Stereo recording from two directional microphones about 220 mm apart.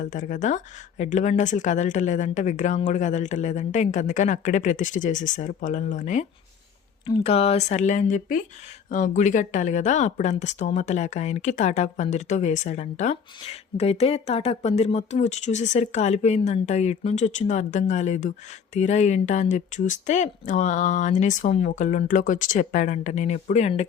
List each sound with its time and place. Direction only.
0.0 s speech: 35° left (ahead or behind)
7.0 s speech: 20° left (ahead or behind)